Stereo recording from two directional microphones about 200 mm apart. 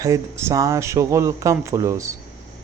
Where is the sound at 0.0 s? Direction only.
15° right (ahead or behind).